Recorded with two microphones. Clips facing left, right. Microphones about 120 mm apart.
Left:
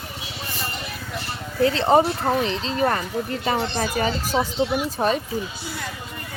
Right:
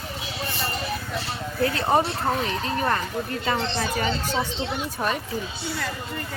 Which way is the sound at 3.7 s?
30° left (ahead or behind).